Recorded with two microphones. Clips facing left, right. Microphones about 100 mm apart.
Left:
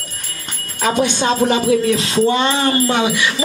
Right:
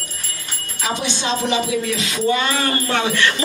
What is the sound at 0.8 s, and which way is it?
Music, 50° left (ahead or behind).